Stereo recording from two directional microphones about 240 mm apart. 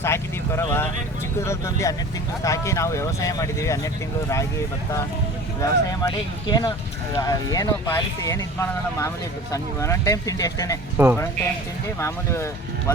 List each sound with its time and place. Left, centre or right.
0.0 s speech: centre
5.5 s speech: centre
10.9 s speech: centre
11.9 s speech: centre